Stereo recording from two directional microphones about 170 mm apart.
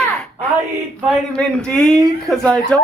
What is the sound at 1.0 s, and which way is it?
Speech, 10° right (ahead or behind).